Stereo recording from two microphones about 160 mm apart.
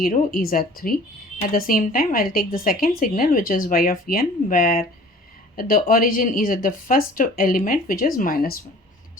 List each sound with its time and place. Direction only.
0.0 s speech: 60° left (ahead or behind)